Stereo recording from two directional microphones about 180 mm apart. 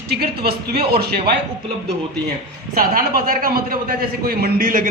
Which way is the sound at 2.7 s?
55° right (ahead or behind).